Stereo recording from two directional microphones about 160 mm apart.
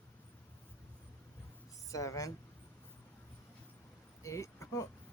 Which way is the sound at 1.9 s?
20° left (ahead or behind).